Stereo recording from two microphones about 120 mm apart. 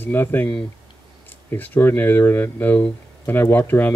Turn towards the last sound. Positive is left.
turn(degrees=20)  # may be behind; listen again after turning